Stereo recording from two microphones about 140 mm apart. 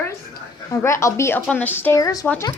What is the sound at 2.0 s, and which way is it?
Speech, 25° left (ahead or behind).